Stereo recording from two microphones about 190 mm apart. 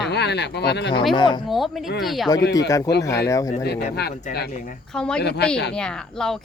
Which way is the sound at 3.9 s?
60° left (ahead or behind).